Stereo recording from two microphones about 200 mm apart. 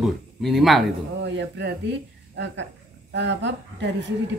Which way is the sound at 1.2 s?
60° right (ahead or behind).